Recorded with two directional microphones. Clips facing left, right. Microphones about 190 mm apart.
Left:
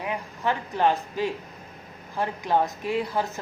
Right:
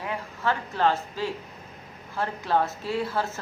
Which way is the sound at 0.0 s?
15° left (ahead or behind).